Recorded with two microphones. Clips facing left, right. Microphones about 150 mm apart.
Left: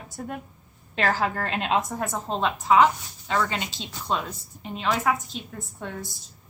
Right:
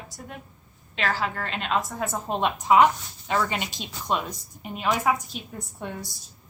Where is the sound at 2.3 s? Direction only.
15° right (ahead or behind).